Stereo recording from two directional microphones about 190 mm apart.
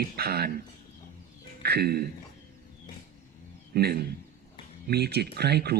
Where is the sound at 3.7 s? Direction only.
55° right (ahead or behind).